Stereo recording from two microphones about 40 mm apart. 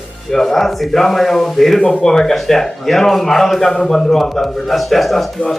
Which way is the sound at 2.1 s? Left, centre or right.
Centre.